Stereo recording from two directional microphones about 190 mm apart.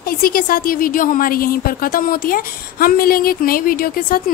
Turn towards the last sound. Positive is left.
turn(degrees=50)  # may be behind; listen again after turning